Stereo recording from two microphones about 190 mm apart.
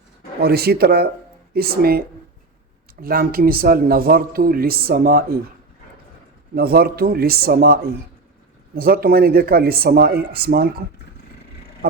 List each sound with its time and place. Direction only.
0.4 s speech: 55° right (ahead or behind)
6.5 s speech: 55° right (ahead or behind)